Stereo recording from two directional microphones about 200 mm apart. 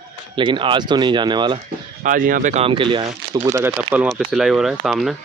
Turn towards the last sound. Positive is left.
turn(degrees=0)  # may be behind; listen again after turning